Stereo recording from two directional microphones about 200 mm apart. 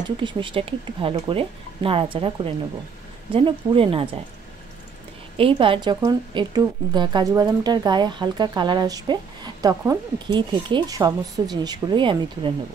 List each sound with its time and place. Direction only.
0.0 s a woman's voice: 25° right (ahead or behind)
5.4 s a woman's voice: 25° right (ahead or behind)